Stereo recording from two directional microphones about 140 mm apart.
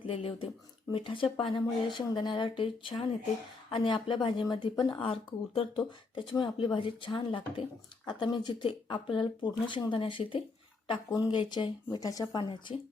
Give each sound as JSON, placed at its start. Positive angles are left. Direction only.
{"t": 0.0, "sound": "speech", "side_deg": 40}